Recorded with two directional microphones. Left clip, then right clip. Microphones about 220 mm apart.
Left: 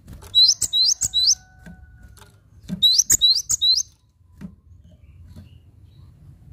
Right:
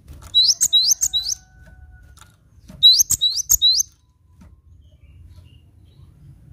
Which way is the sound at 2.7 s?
10° left (ahead or behind).